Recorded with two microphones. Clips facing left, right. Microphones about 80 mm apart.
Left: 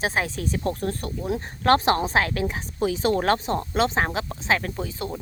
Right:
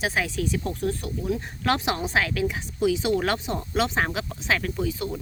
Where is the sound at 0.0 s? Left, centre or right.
Left.